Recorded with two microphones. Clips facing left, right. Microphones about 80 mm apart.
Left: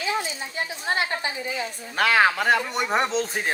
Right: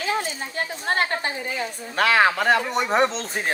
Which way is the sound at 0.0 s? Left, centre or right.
Right.